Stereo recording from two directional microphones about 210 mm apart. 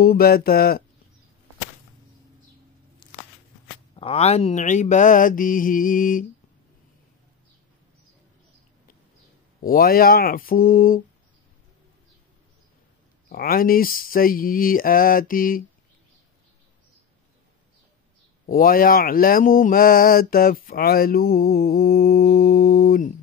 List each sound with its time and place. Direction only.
0.0 s speech: 45° left (ahead or behind)
3.9 s mantra: 25° left (ahead or behind)
9.6 s speech: 45° left (ahead or behind)
13.3 s speech: 45° left (ahead or behind)
18.5 s speech: 40° left (ahead or behind)